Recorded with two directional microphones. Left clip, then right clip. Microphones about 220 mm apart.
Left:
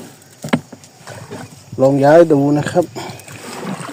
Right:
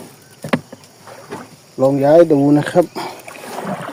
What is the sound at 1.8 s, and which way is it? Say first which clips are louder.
Speech: left 1 dB; 10° left (ahead or behind).